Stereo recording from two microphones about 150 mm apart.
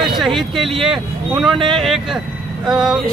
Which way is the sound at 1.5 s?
35° right (ahead or behind).